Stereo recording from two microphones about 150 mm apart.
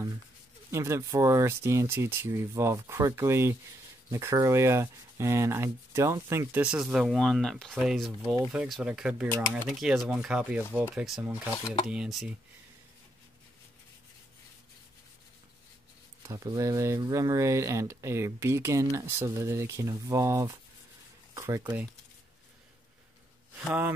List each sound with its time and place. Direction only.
0.7 s speech: 20° right (ahead or behind); by 12.4 s centre (ahead or behind)
16.2 s speech: 25° right (ahead or behind)